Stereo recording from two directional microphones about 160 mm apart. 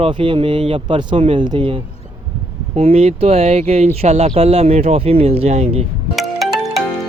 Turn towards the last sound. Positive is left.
turn(degrees=0)  # may be behind; listen again after turning